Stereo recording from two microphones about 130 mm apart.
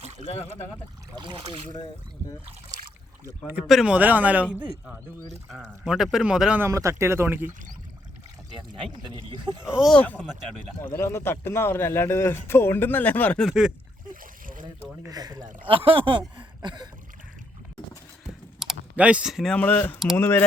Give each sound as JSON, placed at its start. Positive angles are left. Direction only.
{"t": 0.0, "sound": "a sound", "side_deg": -60}
{"t": 1.1, "sound": "speech", "side_deg": -40}
{"t": 3.5, "sound": "speech", "side_deg": -5}
{"t": 5.5, "sound": "speech", "side_deg": -5}
{"t": 6.6, "sound": "speech", "side_deg": -25}
{"t": 8.4, "sound": "speech", "side_deg": -35}
{"t": 9.6, "sound": "speech", "side_deg": -5}
{"t": 9.9, "sound": "speech", "side_deg": 10}
{"t": 13.4, "sound": "speech", "side_deg": -5}
{"t": 15.0, "sound": "speech", "side_deg": -30}
{"t": 15.6, "sound": "speech", "side_deg": -45}
{"t": 18.6, "sound": "typing", "side_deg": -5}
{"t": 19.5, "sound": "speech", "side_deg": 15}